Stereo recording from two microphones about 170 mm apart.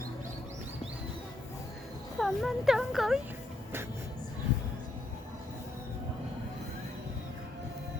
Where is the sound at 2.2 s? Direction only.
Centre (ahead or behind).